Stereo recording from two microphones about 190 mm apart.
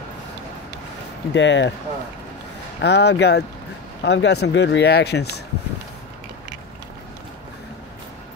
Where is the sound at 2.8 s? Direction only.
60° left (ahead or behind).